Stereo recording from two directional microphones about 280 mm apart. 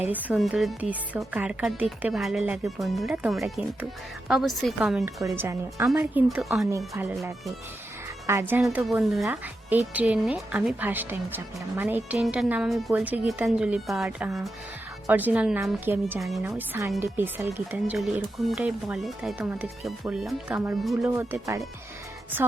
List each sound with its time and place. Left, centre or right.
0.0 s a woman's voice: centre
8.3 s a woman's voice: centre